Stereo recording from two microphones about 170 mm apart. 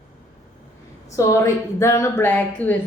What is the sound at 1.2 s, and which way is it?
A woman's voice, 15° left (ahead or behind).